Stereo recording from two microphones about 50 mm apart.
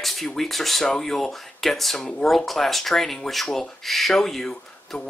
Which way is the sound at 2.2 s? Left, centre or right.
Centre.